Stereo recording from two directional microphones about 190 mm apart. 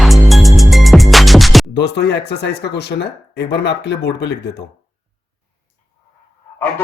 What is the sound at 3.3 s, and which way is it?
Speech, 65° left (ahead or behind).